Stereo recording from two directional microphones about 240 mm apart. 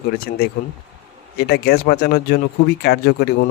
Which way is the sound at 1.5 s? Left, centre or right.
Left.